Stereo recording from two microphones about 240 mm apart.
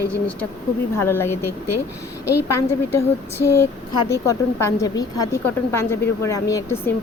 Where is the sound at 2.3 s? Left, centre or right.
Left.